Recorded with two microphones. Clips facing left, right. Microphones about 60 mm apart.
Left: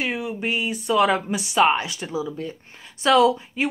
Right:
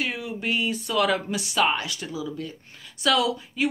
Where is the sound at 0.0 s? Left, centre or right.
Left.